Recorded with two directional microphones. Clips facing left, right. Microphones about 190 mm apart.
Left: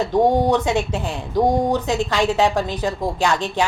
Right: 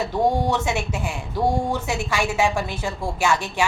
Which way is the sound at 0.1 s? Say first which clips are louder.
Left 6 dB; 20° left (ahead or behind).